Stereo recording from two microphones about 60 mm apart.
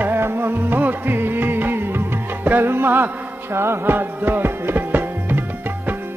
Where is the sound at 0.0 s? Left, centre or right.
Right.